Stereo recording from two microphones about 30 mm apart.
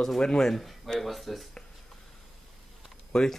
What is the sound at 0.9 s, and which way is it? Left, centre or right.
Speech, centre.